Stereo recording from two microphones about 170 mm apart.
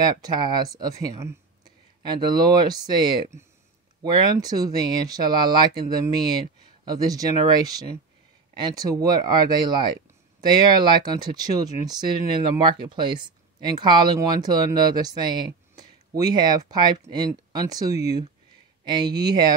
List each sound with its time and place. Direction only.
0.0 s speech: 25° right (ahead or behind)
6.8 s speech: 20° right (ahead or behind)